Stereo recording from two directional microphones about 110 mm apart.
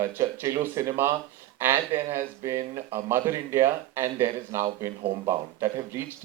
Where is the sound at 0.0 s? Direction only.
25° right (ahead or behind).